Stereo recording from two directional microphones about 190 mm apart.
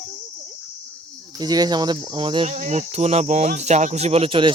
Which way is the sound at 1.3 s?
20° right (ahead or behind).